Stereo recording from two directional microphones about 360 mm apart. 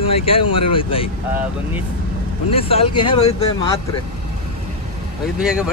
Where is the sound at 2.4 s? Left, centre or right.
Centre.